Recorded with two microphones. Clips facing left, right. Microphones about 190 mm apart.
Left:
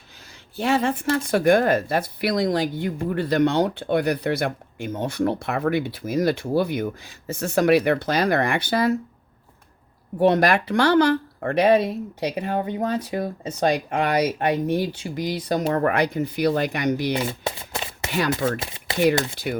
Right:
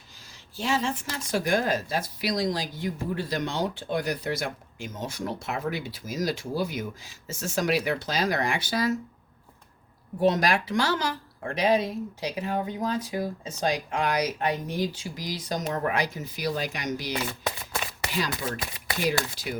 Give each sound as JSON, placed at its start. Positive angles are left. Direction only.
{"t": 0.5, "sound": "speech", "side_deg": 55}
{"t": 10.2, "sound": "speech", "side_deg": 60}
{"t": 17.2, "sound": "a sound", "side_deg": 25}
{"t": 18.1, "sound": "speech", "side_deg": 60}
{"t": 18.6, "sound": "shuffling cards", "side_deg": 25}
{"t": 19.4, "sound": "speech", "side_deg": 60}